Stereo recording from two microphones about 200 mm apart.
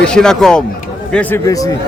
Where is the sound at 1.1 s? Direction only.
15° left (ahead or behind).